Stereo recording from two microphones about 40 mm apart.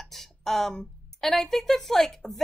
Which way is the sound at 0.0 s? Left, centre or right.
Centre.